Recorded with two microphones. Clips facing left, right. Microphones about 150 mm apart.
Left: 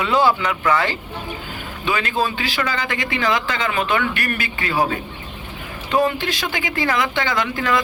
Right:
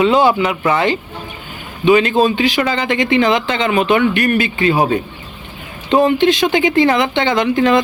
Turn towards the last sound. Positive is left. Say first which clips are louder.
# right 8 dB
turn(degrees=-25)  # may be behind; listen again after turning